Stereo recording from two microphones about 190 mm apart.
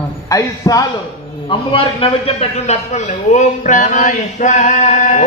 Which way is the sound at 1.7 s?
30° left (ahead or behind).